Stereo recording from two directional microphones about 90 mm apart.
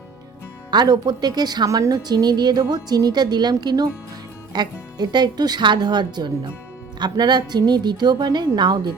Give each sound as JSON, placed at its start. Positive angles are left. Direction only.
{"t": 0.7, "sound": "speech", "side_deg": -50}